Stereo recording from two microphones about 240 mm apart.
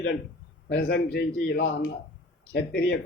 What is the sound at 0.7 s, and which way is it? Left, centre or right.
A man's voice, left.